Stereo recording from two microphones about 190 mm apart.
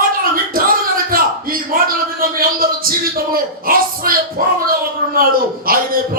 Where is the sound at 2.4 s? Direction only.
50° right (ahead or behind).